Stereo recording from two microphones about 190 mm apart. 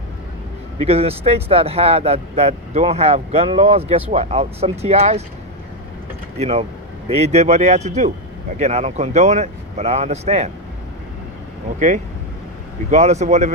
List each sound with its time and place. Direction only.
0.8 s speech: 30° right (ahead or behind)
6.3 s speech: 35° right (ahead or behind)
12.9 s speech: 35° right (ahead or behind)